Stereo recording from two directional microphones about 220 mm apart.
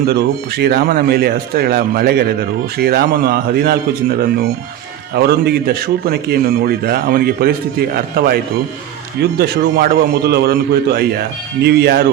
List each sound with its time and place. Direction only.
0.1 s a man's voice: 45° right (ahead or behind)
9.4 s a man's voice: 45° right (ahead or behind)